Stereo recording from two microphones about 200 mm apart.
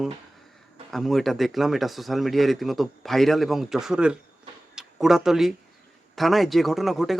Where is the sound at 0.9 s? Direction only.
Centre (ahead or behind).